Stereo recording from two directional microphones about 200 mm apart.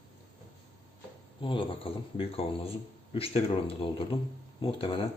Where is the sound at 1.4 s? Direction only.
25° left (ahead or behind).